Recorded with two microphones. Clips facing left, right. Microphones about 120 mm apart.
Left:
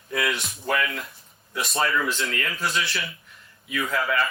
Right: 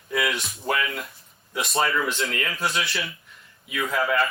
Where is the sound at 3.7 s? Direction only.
25° right (ahead or behind).